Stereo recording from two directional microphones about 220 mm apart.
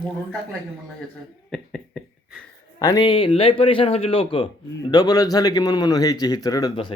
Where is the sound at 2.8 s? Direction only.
15° left (ahead or behind).